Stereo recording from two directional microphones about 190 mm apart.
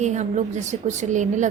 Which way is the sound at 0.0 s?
40° right (ahead or behind).